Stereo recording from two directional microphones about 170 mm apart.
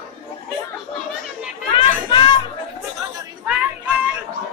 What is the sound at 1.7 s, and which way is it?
Chatter, 30° left (ahead or behind).